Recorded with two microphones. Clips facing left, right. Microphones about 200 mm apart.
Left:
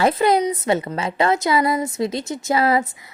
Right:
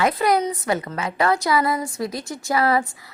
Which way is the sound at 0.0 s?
25° left (ahead or behind).